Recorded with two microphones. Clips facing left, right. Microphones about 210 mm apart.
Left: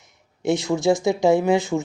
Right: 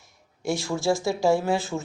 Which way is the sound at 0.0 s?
20° left (ahead or behind).